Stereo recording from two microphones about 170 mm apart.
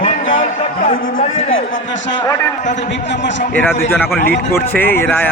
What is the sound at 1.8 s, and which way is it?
Speech, 90° left.